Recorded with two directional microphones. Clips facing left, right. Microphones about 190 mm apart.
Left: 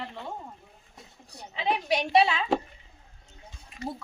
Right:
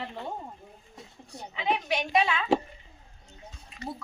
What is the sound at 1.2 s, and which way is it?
A woman's voice, 30° left (ahead or behind).